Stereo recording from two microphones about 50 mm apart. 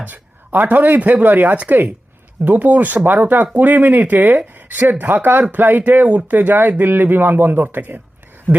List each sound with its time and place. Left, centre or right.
0.0 s speech: right